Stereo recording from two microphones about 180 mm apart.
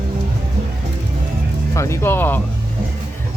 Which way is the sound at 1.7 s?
15° left (ahead or behind).